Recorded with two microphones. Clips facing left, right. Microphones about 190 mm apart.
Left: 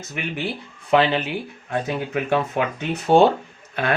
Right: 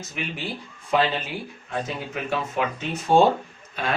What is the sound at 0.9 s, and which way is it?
Speech, 65° left (ahead or behind).